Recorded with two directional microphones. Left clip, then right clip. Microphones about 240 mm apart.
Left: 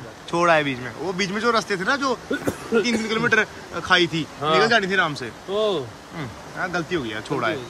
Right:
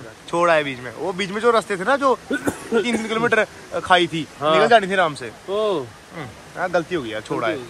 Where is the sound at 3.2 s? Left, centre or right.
Centre.